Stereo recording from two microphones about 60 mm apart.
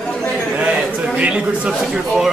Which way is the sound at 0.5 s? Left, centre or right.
Right.